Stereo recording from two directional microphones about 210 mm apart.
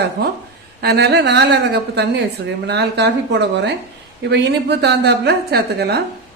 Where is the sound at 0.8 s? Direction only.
50° right (ahead or behind).